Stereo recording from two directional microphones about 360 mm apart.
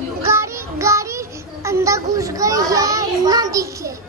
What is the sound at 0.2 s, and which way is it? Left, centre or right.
Child singing, centre.